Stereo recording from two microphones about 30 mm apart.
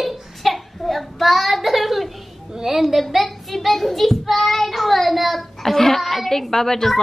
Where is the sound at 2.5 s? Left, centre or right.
Centre.